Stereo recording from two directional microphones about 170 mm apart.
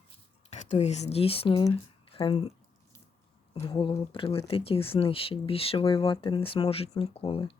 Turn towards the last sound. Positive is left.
turn(degrees=30)  # may be behind; listen again after turning